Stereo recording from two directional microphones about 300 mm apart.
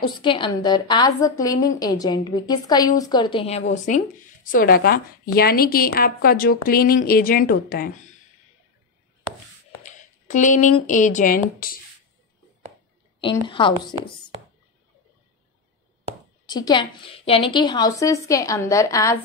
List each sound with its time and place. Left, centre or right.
0.0 s a woman's voice: centre
9.8 s speech: left
13.5 s a woman's voice: centre
16.4 s a woman's voice: centre